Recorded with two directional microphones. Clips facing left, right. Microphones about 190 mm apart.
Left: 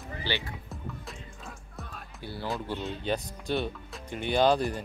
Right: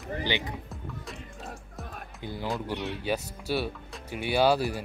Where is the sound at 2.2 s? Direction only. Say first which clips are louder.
Right 2 dB; 15° right (ahead or behind).